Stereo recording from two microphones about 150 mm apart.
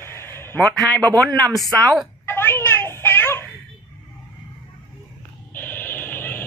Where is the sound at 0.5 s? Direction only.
5° left (ahead or behind).